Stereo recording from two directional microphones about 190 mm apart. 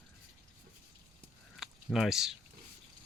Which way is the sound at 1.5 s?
Centre (ahead or behind).